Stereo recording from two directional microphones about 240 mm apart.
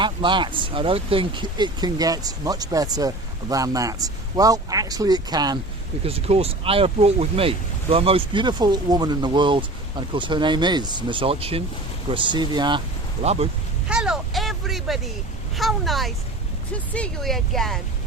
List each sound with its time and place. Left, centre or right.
0.0 s speech: centre
13.8 s a sound: centre
15.5 s speech: centre